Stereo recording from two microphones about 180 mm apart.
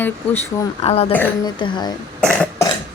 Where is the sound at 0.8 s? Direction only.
35° left (ahead or behind).